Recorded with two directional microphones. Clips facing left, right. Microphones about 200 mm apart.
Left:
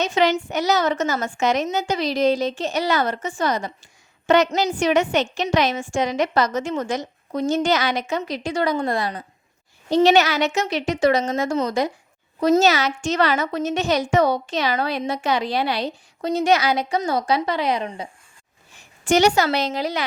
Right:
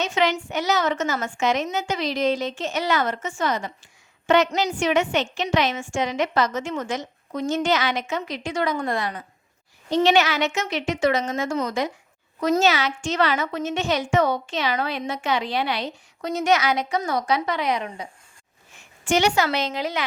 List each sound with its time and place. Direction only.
0.0 s a woman's voice: 40° left (ahead or behind)